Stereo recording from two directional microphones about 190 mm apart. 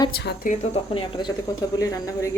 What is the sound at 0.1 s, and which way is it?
Speech, 55° left (ahead or behind).